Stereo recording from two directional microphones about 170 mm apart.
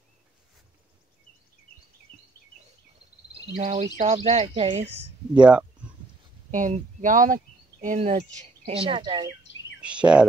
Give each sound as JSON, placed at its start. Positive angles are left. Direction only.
{"t": 3.5, "sound": "speech", "side_deg": -40}
{"t": 5.3, "sound": "speech", "side_deg": -5}
{"t": 6.5, "sound": "speech", "side_deg": -50}
{"t": 9.4, "sound": "bird vocalization", "side_deg": 90}
{"t": 9.8, "sound": "speech", "side_deg": -5}